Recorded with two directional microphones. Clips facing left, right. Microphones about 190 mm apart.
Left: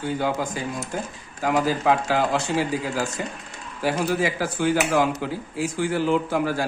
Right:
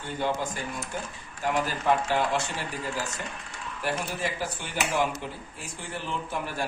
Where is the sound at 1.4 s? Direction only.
90° left.